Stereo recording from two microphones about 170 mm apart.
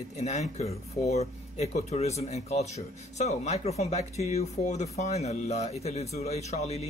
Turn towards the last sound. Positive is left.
turn(degrees=40)  # may be behind; listen again after turning